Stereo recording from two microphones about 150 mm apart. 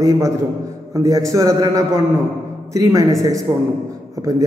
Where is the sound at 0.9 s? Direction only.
20° right (ahead or behind).